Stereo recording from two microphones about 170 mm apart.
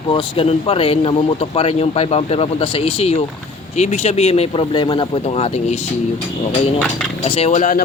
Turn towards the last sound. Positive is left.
turn(degrees=50)  # may be behind; listen again after turning